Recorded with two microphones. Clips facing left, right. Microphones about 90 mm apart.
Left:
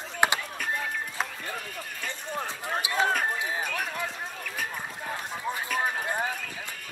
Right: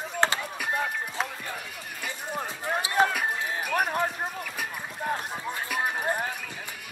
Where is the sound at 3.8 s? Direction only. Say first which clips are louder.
Right 6 dB; 45° right (ahead or behind).